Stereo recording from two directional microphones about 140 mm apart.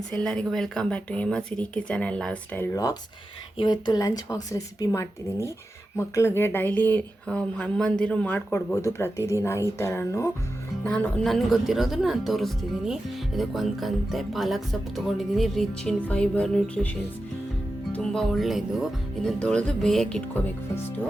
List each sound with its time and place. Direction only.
0.1 s speech: 5° left (ahead or behind)
3.6 s speech: 30° left (ahead or behind)
10.8 s speech: 5° left (ahead or behind)
17.9 s speech: 5° left (ahead or behind)